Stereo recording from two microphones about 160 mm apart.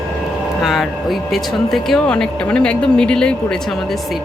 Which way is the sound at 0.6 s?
Centre (ahead or behind).